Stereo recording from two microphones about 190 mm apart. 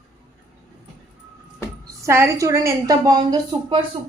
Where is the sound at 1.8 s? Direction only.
15° right (ahead or behind).